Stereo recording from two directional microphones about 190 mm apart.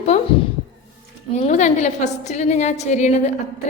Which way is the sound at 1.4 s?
40° left (ahead or behind).